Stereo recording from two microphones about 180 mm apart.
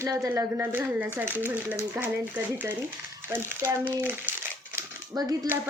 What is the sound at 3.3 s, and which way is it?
Speech, 15° right (ahead or behind).